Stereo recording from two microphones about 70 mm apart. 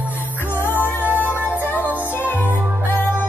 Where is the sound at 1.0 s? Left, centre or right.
Right.